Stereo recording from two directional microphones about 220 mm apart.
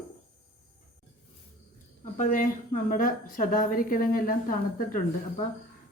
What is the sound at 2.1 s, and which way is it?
A woman's voice, 40° left (ahead or behind).